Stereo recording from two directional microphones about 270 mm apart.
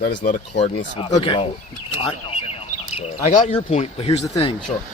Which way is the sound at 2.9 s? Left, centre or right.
Left.